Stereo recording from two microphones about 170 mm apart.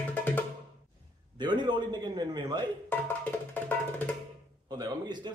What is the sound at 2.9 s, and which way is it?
Music, 10° left (ahead or behind).